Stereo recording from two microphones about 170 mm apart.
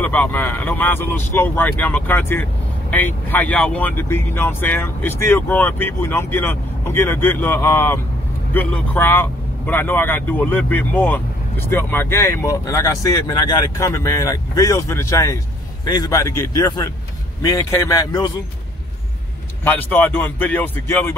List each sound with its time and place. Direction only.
0.0 s a man's voice: 10° left (ahead or behind)
19.6 s speech: 10° left (ahead or behind)